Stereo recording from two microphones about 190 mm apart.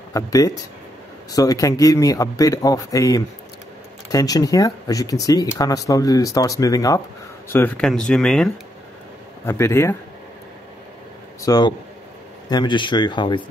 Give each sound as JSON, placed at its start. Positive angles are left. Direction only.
{"t": 0.1, "sound": "a man's voice", "side_deg": 15}
{"t": 9.5, "sound": "a man's voice", "side_deg": 15}
{"t": 11.4, "sound": "speech", "side_deg": 20}